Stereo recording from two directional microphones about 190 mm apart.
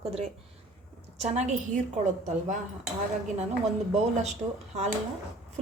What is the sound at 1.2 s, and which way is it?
Speech, 35° right (ahead or behind).